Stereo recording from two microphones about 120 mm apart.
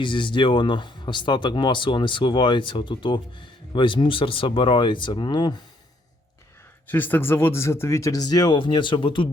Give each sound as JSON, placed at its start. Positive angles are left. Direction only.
{"t": 0.0, "sound": "speech", "side_deg": 45}
{"t": 6.8, "sound": "speech", "side_deg": 15}